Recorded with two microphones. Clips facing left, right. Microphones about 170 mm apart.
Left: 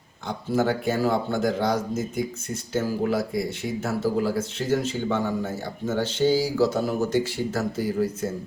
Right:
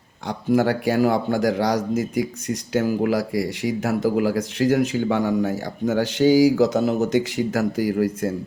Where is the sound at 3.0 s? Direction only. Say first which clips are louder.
Right 3 dB; 85° right.